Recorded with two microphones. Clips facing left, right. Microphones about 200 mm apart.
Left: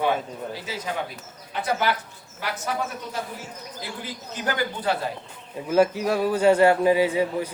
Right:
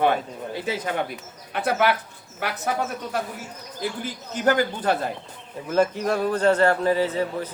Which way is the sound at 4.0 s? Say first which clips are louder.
Right 4 dB; 50° right (ahead or behind).